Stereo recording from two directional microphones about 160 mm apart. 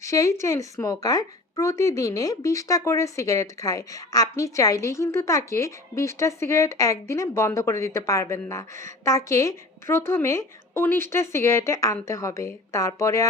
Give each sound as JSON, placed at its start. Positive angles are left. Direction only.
{"t": 0.0, "sound": "a woman's voice", "side_deg": 20}